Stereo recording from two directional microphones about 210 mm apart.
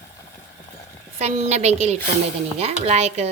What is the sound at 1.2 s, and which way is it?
Speech, 30° right (ahead or behind).